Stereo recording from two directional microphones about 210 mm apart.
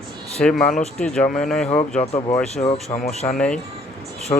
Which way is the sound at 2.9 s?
35° left (ahead or behind).